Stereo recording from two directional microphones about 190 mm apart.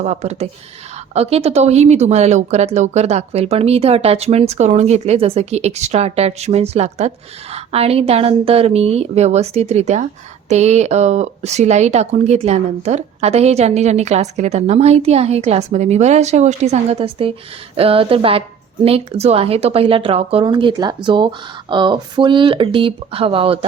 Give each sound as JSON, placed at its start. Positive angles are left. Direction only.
{"t": 0.0, "sound": "speech", "side_deg": -35}